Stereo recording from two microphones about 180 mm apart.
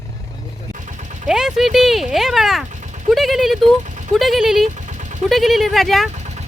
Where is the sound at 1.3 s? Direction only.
5° right (ahead or behind).